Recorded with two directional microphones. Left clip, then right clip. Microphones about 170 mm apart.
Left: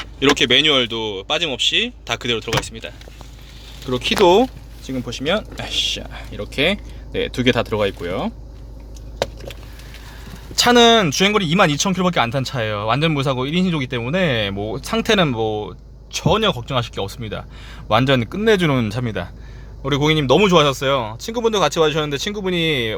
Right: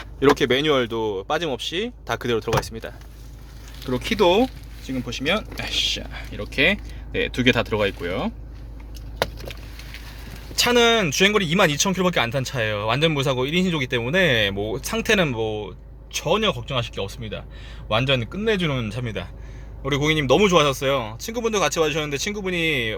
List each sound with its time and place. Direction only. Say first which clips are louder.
0.2 s speech: left 4 dB; 5° right (ahead or behind)
3.8 s speech: left 5 dB; 10° left (ahead or behind)
10.5 s speech: left 5 dB; 25° left (ahead or behind)